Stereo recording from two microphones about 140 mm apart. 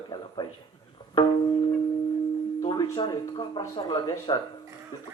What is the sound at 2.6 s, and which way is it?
A man's voice, 35° left (ahead or behind).